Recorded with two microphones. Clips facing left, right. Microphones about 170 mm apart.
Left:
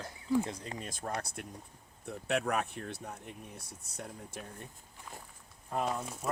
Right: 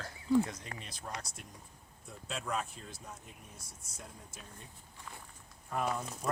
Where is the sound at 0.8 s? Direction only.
50° left (ahead or behind); by 4.4 s 65° left (ahead or behind).